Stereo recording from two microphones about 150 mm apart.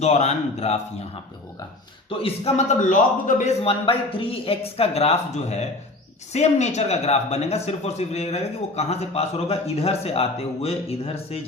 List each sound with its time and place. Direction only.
0.0 s a man's voice: 45° left (ahead or behind)
2.0 s a man's voice: 40° left (ahead or behind)
2.9 s a man's voice: 60° left (ahead or behind)
3.6 s a man's voice: 40° left (ahead or behind)